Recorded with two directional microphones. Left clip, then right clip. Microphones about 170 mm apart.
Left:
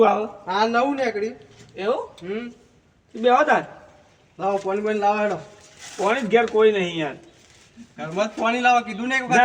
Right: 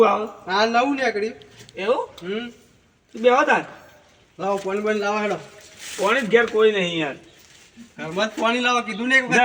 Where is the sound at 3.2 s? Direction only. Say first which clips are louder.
Even; 30° left (ahead or behind).